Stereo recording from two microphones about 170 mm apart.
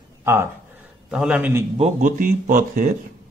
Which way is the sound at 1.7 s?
45° right (ahead or behind).